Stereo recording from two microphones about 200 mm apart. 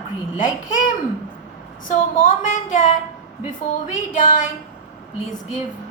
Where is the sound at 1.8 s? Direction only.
40° left (ahead or behind).